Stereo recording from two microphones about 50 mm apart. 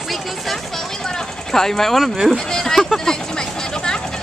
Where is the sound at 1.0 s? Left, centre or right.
Centre.